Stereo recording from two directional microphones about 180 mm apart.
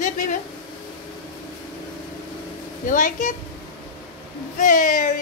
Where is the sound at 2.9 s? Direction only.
45° left (ahead or behind).